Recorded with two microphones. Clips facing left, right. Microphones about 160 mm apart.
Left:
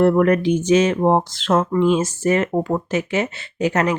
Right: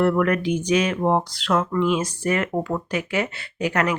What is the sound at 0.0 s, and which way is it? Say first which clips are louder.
Speech: left 5 dB; 30° left (ahead or behind).